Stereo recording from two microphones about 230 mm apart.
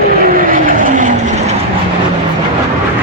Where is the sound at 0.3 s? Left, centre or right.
Right.